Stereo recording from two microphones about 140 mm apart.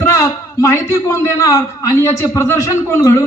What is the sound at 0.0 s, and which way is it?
A man's voice, 20° left (ahead or behind).